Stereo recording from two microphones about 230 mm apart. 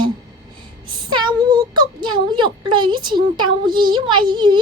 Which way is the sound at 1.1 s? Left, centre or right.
Centre.